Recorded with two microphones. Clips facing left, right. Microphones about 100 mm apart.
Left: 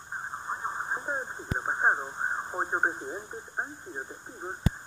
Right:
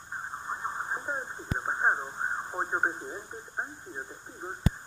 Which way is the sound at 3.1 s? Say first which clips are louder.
Left 2 dB; 20° left (ahead or behind).